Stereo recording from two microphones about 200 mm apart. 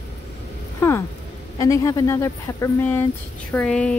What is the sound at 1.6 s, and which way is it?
Speech, 15° left (ahead or behind).